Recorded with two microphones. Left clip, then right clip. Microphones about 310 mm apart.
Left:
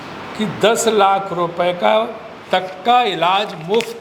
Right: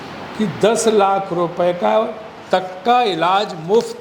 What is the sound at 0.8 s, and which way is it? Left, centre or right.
A man's voice, left.